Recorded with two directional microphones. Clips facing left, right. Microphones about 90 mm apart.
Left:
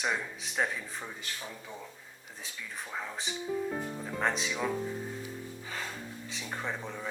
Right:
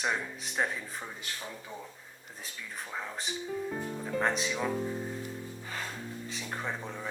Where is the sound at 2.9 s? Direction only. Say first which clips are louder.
Even; centre (ahead or behind).